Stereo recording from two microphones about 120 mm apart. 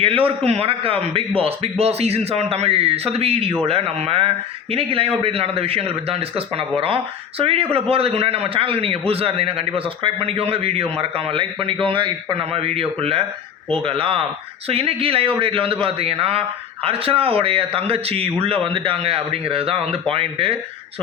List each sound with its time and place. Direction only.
0.0 s a man's voice: 50° right (ahead or behind)